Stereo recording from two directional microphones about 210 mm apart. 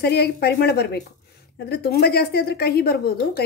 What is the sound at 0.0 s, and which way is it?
A woman's voice, 50° left (ahead or behind).